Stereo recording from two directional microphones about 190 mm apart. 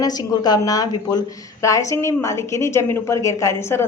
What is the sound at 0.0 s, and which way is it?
A woman's voice, 20° left (ahead or behind).